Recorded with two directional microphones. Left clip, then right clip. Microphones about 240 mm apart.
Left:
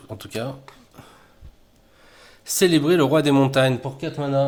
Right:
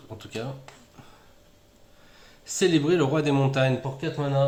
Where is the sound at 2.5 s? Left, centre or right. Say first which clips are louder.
Left 4 dB; left.